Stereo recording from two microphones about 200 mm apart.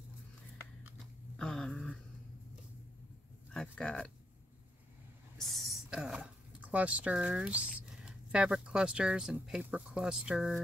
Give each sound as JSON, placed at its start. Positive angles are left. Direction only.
{"t": 1.3, "sound": "dog", "side_deg": 5}
{"t": 3.5, "sound": "a sound", "side_deg": 0}
{"t": 5.4, "sound": "speech", "side_deg": 0}